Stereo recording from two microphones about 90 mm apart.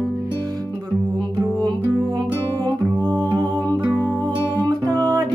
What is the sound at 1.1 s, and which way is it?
Music, 55° right (ahead or behind).